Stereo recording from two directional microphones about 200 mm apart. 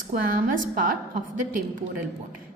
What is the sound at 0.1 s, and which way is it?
Speech, 45° right (ahead or behind).